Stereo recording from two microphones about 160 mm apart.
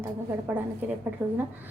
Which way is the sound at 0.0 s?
10° right (ahead or behind).